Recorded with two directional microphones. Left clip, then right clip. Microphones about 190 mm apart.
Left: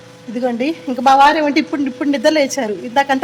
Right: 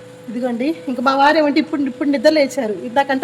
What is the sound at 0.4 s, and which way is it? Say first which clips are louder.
Speech: left 2 dB; 15° left (ahead or behind).